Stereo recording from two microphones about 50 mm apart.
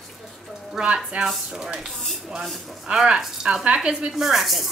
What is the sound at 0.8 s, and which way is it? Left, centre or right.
Speech, centre.